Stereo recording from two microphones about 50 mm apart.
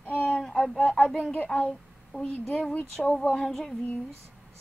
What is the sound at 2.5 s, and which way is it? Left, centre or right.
Speech, left.